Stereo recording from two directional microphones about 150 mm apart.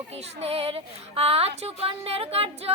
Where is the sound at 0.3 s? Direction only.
40° right (ahead or behind).